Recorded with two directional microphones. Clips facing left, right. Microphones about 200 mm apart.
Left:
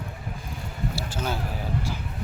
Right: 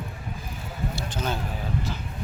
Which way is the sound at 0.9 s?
10° left (ahead or behind).